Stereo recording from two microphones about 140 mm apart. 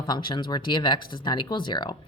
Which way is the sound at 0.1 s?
35° left (ahead or behind).